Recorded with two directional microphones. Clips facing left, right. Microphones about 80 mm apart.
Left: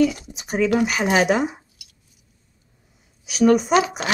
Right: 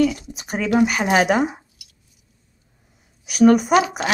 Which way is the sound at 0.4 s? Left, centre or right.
Centre.